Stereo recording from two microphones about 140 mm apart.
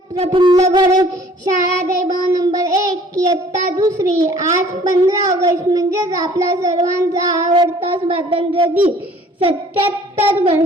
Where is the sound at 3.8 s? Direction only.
25° right (ahead or behind).